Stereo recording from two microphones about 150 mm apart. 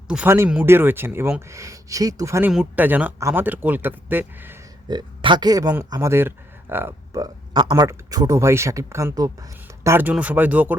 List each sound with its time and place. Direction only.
0.1 s speech: 10° right (ahead or behind)
2.5 s speech: 10° right (ahead or behind)
4.9 s speech: 30° right (ahead or behind); by 7.2 s 15° right (ahead or behind)
7.2 s speech: 30° right (ahead or behind); by 10.8 s 10° right (ahead or behind)